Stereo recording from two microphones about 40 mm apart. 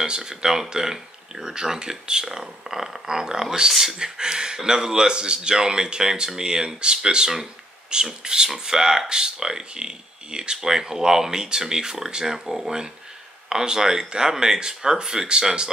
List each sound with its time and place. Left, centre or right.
0.0 s speech: centre